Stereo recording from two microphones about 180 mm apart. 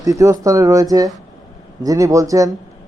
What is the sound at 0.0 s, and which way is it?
A man's voice, 20° right (ahead or behind).